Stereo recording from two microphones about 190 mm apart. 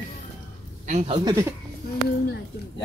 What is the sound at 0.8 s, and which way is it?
Speech, 35° right (ahead or behind).